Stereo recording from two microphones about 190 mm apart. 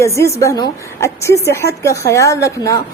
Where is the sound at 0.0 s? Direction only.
15° left (ahead or behind).